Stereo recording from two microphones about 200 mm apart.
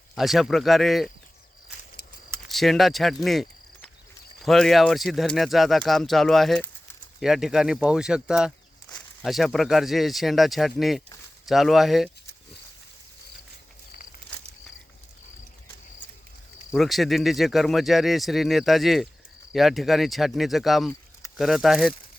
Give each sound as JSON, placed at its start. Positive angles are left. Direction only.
{"t": 0.2, "sound": "speech", "side_deg": 0}
{"t": 2.5, "sound": "speech", "side_deg": 0}
{"t": 4.4, "sound": "speech", "side_deg": 0}
{"t": 16.7, "sound": "speech", "side_deg": 0}